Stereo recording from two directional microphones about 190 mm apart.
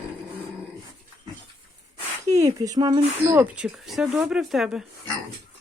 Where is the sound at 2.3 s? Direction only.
20° right (ahead or behind).